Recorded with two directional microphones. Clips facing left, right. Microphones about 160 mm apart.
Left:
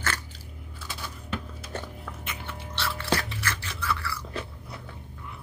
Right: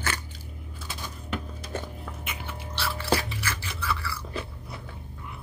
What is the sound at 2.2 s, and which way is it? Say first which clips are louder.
Toothbrush: right 1 dB; 5° right (ahead or behind).